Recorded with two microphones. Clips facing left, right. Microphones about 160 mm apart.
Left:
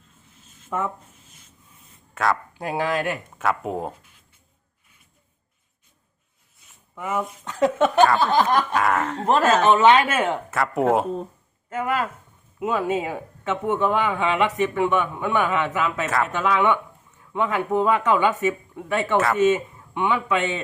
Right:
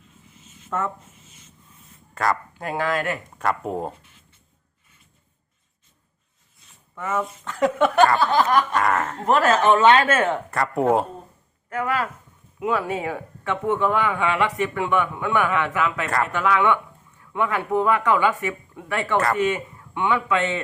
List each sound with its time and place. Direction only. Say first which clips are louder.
0.7 s speech: even; 10° left (ahead or behind)
1.1 s a sound: right 2 dB; centre (ahead or behind)
2.1 s speech: even; centre (ahead or behind)
2.6 s speech: even; 15° left (ahead or behind)
3.3 s speech: even; centre (ahead or behind)
6.9 s a man's voice: right 1 dB; 10° left (ahead or behind)
8.7 s speech: even; centre (ahead or behind)
9.3 s speech: even; 25° left (ahead or behind); by 10.6 s 10° left (ahead or behind)
10.6 s speech: even; centre (ahead or behind)
11.7 s a man's voice: even; 20° left (ahead or behind)
19.1 s speech: even; centre (ahead or behind)
19.4 s speech: left 4 dB; 20° left (ahead or behind)